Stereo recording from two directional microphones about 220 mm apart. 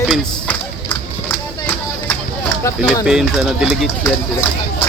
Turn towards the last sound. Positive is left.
turn(degrees=0)  # may be behind; listen again after turning